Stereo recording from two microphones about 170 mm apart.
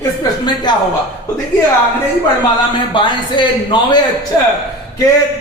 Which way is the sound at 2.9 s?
30° left (ahead or behind).